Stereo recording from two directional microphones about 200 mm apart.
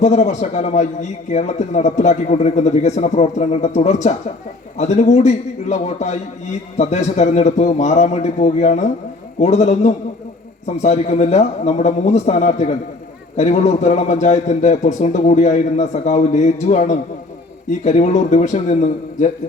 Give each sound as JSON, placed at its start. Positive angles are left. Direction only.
{"t": 0.0, "sound": "a man's voice", "side_deg": 35}